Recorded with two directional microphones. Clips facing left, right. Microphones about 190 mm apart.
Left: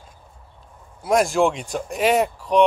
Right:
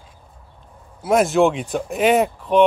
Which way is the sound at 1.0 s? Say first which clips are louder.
Right 2 dB; centre (ahead or behind).